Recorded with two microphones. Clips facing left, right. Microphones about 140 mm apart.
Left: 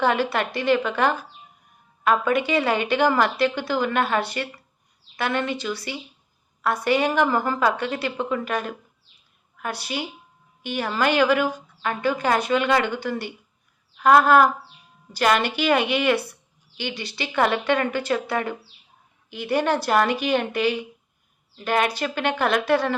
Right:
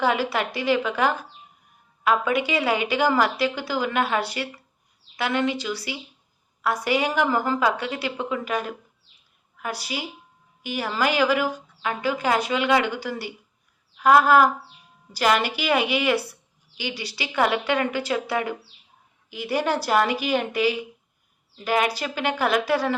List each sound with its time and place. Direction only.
0.0 s a woman's voice: 10° right (ahead or behind)
6.6 s a woman's voice: 10° right (ahead or behind)
9.8 s a woman's voice: 5° right (ahead or behind)
16.9 s speech: 55° left (ahead or behind)
17.2 s a woman's voice: 10° right (ahead or behind)